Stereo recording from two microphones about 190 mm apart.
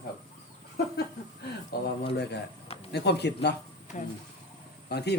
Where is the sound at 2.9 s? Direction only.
60° left (ahead or behind).